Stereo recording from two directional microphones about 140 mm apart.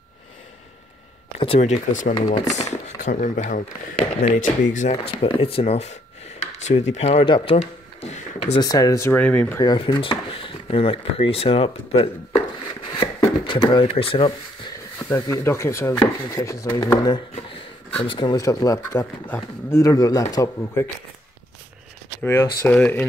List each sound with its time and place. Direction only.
1.6 s speech: 60° left (ahead or behind)
2.1 s speech: 40° left (ahead or behind)
2.5 s speech: 55° left (ahead or behind)
4.9 s speech: 40° left (ahead or behind)
8.5 s speech: 25° left (ahead or behind)
9.2 s speech: 10° left (ahead or behind)
9.8 s speech: 35° left (ahead or behind)
13.7 s speech: 35° left (ahead or behind)
15.0 s speech: 20° left (ahead or behind)
17.0 s a sound: 35° left (ahead or behind)
18.0 s speech: 35° left (ahead or behind)
18.4 s speech: 25° left (ahead or behind)
19.8 s speech: 25° left (ahead or behind)
22.2 s speech: 15° left (ahead or behind)